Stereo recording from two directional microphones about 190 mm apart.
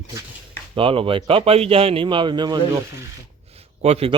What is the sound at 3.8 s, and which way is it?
Speech, 35° right (ahead or behind).